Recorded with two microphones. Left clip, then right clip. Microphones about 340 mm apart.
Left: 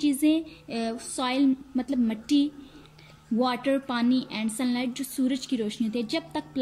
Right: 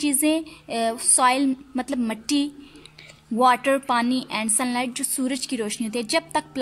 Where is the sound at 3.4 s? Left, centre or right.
Centre.